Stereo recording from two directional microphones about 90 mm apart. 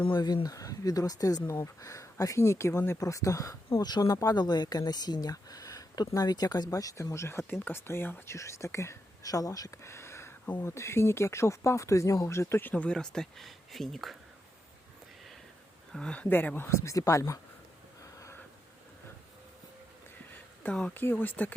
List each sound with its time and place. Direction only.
0.4 s speech: 40° left (ahead or behind)
12.7 s speech: 10° left (ahead or behind)
15.9 s speech: 10° left (ahead or behind)
16.3 s speech: 20° left (ahead or behind)
16.6 s speech: 35° left (ahead or behind)
18.0 s gasp: 40° left (ahead or behind)
20.9 s speech: 20° left (ahead or behind)